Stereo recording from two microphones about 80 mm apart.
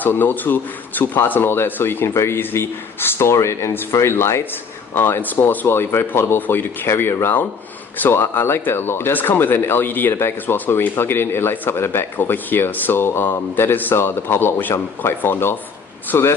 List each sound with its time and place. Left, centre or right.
0.0 s speech: left